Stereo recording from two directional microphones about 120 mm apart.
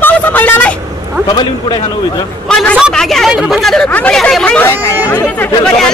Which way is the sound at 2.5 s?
5° left (ahead or behind).